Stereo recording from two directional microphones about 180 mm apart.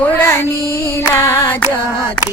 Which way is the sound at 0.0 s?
10° left (ahead or behind).